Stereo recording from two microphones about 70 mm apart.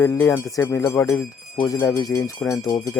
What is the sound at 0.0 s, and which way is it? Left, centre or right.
Speech, left.